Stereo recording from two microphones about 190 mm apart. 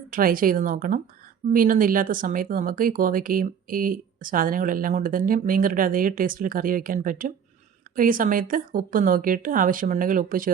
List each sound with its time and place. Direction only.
0.1 s speech: 50° right (ahead or behind)